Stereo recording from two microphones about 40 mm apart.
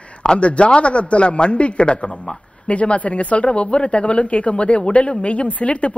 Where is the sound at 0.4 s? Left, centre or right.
Left.